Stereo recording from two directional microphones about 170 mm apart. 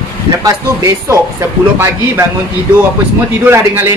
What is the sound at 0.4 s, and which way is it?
Speech, 20° right (ahead or behind).